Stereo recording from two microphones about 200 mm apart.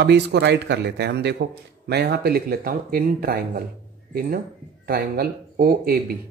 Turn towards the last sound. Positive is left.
turn(degrees=-50)  # may be behind; listen again after turning